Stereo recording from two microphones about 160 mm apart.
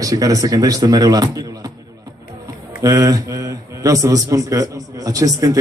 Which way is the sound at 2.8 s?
20° right (ahead or behind).